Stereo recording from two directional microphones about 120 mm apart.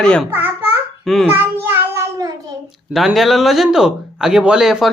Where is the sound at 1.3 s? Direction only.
15° right (ahead or behind).